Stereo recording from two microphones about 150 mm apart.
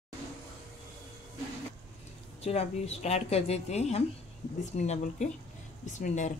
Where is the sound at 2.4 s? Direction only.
45° left (ahead or behind).